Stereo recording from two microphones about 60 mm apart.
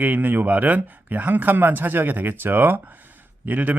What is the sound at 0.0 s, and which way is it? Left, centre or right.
Speech, right.